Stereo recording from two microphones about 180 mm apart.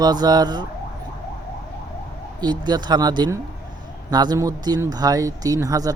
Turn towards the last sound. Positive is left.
turn(degrees=-20)  # may be behind; listen again after turning